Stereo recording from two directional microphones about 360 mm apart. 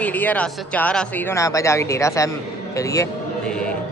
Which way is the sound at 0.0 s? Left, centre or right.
Centre.